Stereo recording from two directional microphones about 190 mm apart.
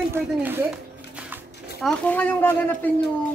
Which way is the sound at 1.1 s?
5° right (ahead or behind).